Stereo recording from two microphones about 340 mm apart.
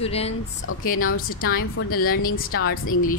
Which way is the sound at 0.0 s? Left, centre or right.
Centre.